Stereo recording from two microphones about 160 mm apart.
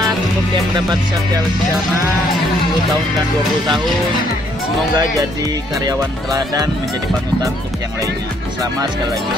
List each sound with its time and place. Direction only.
4.9 s speech: 20° right (ahead or behind)